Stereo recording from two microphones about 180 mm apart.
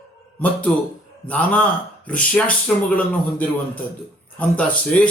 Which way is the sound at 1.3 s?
5° left (ahead or behind).